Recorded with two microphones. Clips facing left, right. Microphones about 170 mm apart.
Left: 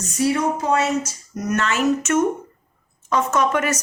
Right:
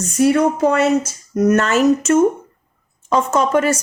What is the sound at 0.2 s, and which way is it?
Speech, 60° right (ahead or behind).